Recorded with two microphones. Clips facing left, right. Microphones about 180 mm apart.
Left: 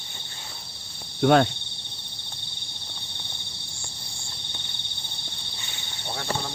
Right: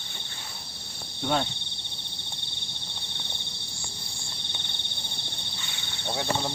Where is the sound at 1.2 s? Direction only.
70° left (ahead or behind).